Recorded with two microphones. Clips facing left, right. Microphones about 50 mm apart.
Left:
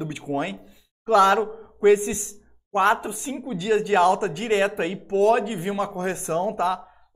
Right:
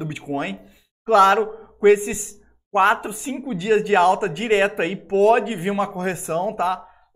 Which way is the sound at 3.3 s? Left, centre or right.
Right.